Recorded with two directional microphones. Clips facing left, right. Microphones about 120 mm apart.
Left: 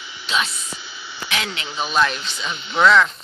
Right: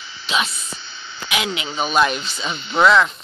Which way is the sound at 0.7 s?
10° left (ahead or behind).